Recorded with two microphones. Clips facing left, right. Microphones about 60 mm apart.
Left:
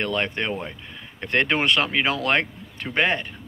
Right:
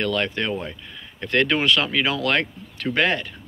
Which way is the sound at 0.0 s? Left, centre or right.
Left.